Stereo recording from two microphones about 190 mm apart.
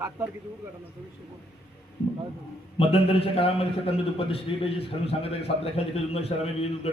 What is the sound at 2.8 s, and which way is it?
A man's voice, 30° left (ahead or behind).